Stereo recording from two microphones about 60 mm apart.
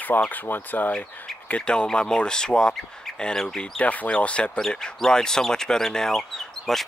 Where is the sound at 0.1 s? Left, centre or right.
Left.